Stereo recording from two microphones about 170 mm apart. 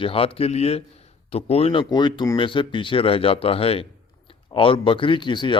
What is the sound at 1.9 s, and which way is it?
Speech, 25° left (ahead or behind).